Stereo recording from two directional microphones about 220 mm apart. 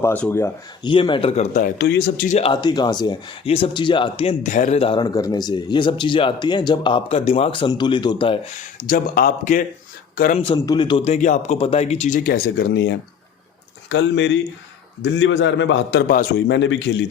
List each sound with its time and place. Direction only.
0.0 s speech: 10° left (ahead or behind); by 2.3 s 45° left (ahead or behind)
2.3 s speech: 25° left (ahead or behind)
8.8 s speech: 40° left (ahead or behind)
10.3 s a man's voice: 25° left (ahead or behind); by 16.2 s 45° left (ahead or behind)
16.5 s a man's voice: 55° left (ahead or behind)